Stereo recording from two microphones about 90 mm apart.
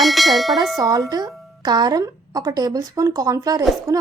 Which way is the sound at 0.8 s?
50° right (ahead or behind).